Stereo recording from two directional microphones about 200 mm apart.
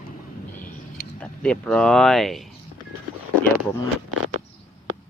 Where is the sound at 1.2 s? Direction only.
5° left (ahead or behind).